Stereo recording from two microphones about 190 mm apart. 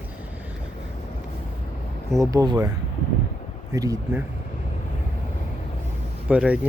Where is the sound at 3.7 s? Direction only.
20° right (ahead or behind).